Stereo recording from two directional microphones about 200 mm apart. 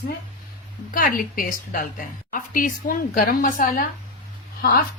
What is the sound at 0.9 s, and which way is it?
A woman's voice, 45° left (ahead or behind).